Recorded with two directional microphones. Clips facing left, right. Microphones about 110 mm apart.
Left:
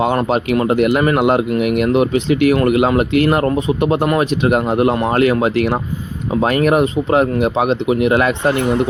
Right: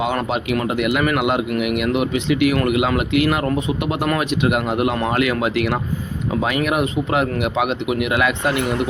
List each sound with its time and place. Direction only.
0.0 s speech: 35° left (ahead or behind)